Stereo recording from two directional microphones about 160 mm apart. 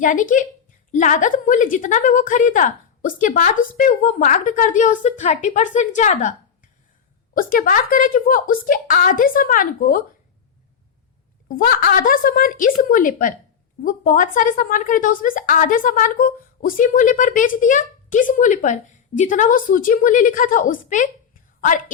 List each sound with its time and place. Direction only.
0.0 s a woman's voice: 55° left (ahead or behind)
7.3 s a woman's voice: 60° left (ahead or behind)
11.4 s a woman's voice: 60° left (ahead or behind)